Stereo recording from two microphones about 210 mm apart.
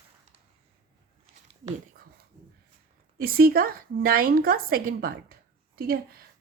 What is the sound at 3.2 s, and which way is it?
A woman's voice, 45° right (ahead or behind).